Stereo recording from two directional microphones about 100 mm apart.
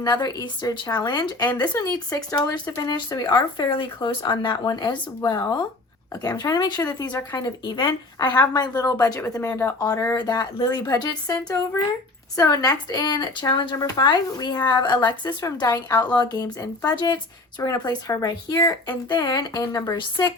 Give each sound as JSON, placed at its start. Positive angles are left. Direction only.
{"t": 0.0, "sound": "speech", "side_deg": 40}
{"t": 9.4, "sound": "speech", "side_deg": 25}